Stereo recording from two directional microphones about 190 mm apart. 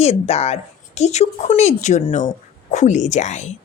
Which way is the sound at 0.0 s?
35° left (ahead or behind).